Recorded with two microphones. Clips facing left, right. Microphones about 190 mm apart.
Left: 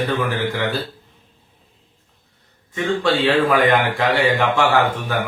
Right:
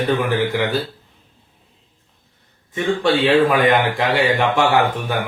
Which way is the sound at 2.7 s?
15° right (ahead or behind).